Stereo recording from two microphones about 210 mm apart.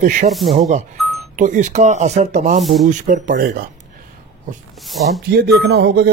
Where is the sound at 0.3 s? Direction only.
Centre (ahead or behind).